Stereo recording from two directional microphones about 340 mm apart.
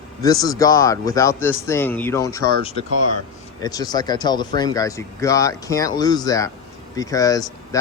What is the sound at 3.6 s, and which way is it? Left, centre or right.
Speech, centre.